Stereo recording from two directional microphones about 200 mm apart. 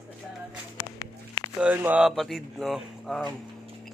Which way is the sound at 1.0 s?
20° left (ahead or behind).